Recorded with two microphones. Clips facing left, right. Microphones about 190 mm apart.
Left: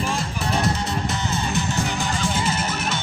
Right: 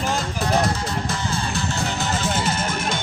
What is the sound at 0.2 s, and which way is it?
Music, 25° left (ahead or behind).